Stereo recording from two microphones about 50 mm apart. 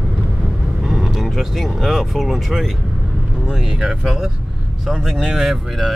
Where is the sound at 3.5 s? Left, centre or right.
Centre.